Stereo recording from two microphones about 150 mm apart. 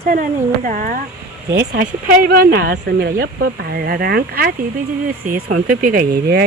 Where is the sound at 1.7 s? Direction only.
75° right (ahead or behind).